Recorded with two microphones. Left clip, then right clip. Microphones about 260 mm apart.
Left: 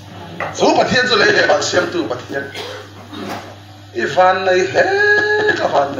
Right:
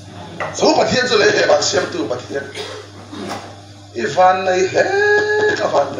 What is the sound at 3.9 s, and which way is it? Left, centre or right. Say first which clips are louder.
Speech: even; left.